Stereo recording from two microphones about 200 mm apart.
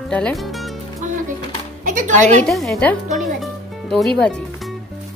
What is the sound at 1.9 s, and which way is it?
Speech, 40° right (ahead or behind).